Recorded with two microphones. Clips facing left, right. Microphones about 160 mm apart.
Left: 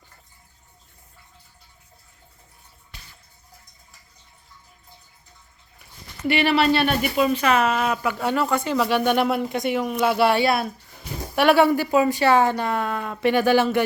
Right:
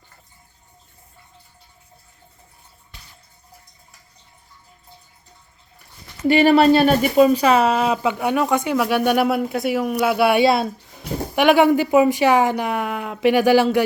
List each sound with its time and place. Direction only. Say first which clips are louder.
6.2 s speech: right 6 dB; 40° right (ahead or behind)
8.2 s a woman's voice: right 3 dB; 15° right (ahead or behind)
10.3 s a woman's voice: right 5 dB; 25° right (ahead or behind)